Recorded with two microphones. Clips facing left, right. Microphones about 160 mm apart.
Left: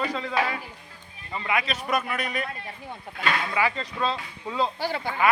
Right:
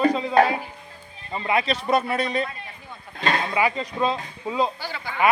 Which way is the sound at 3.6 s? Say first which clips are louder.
Right 3 dB; 15° right (ahead or behind).